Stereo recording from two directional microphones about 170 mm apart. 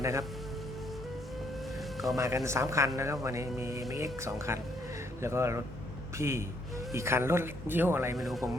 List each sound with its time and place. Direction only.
0.0 s speech: 20° right (ahead or behind)
2.1 s speech: 15° right (ahead or behind)
8.1 s speech: centre (ahead or behind)